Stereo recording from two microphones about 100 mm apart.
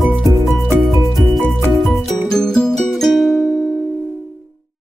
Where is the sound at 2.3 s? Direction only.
5° left (ahead or behind).